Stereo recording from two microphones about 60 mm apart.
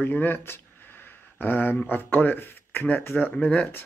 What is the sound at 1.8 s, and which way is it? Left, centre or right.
Speech, left.